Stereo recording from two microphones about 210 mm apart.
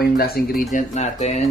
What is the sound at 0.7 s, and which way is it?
Speech, 30° left (ahead or behind).